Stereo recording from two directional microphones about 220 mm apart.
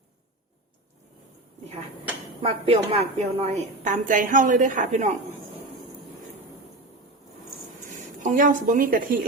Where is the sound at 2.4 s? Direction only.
25° right (ahead or behind).